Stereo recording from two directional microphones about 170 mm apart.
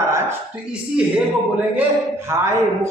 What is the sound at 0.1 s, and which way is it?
Speech, 10° right (ahead or behind).